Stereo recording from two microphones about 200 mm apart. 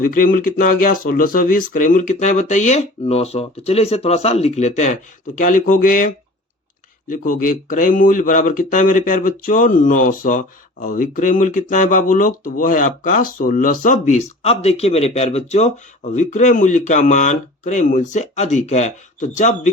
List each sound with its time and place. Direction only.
0.0 s speech: 45° left (ahead or behind)
7.1 s speech: 45° left (ahead or behind)